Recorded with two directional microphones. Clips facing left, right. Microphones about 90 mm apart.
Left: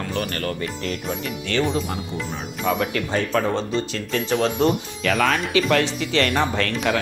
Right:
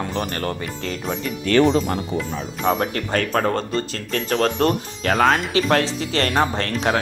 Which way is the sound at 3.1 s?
55° right (ahead or behind).